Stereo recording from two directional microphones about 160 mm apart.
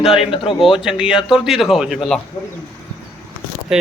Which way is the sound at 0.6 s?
5° right (ahead or behind).